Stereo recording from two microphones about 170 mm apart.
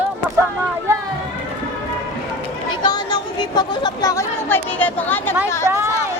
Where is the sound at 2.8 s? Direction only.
25° left (ahead or behind).